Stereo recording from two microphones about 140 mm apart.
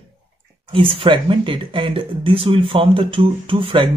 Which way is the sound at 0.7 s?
40° right (ahead or behind).